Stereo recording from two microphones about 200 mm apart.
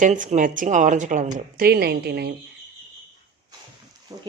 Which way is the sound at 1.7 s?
55° right (ahead or behind).